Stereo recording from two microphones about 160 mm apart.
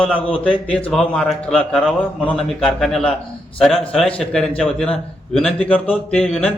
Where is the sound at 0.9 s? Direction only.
5° left (ahead or behind).